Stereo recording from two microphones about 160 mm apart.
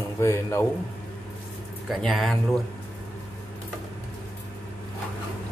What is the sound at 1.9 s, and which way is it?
Speech, centre (ahead or behind).